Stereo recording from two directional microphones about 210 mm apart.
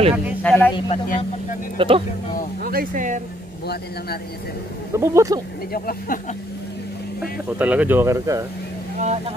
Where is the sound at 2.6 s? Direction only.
40° right (ahead or behind).